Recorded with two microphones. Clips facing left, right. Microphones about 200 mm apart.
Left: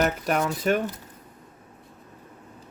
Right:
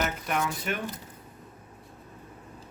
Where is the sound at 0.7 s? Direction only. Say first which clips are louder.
Left 10 dB; 40° left (ahead or behind).